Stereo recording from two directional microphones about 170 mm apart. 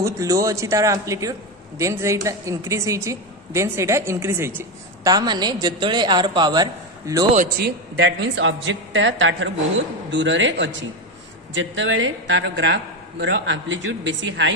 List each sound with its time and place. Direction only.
0.0 s a woman's voice: 20° right (ahead or behind)
7.5 s a man's voice: 75° right (ahead or behind)